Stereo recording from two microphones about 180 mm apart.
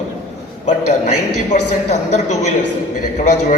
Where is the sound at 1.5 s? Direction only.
40° left (ahead or behind).